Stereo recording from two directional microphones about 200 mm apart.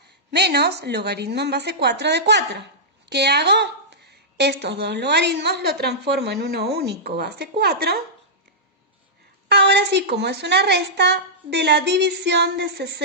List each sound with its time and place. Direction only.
0.3 s a woman's voice: 55° right (ahead or behind)
9.5 s a woman's voice: 55° right (ahead or behind)